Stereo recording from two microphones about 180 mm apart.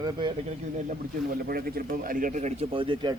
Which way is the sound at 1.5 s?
55° right (ahead or behind).